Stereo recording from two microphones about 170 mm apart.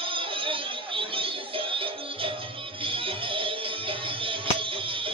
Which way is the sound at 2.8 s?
30° right (ahead or behind).